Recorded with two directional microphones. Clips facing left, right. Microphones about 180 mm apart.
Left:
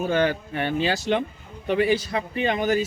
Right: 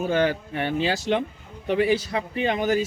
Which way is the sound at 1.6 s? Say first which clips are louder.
Even; 30° right (ahead or behind).